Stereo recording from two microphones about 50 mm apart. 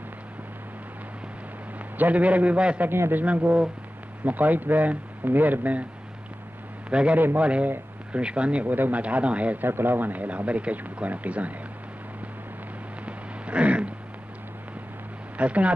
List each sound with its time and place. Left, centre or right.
1.8 s a man's voice: right
2.9 s a man's voice: right
3.3 s speech: right
6.9 s a man's voice: right
8.7 s speech: right
9.0 s speech: right
9.7 s speech: right
13.0 s a sound: right
15.3 s speech: right